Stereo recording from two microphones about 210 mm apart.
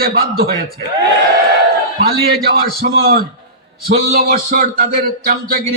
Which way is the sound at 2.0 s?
45° right (ahead or behind).